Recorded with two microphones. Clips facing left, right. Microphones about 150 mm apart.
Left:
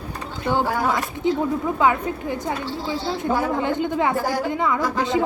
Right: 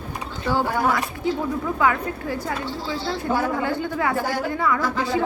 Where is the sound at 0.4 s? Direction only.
20° left (ahead or behind).